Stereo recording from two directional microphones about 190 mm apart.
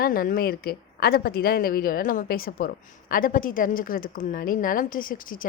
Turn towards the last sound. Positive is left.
turn(degrees=45)  # may be behind; listen again after turning